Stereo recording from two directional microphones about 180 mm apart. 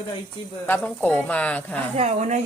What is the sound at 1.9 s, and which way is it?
Speech, 35° right (ahead or behind).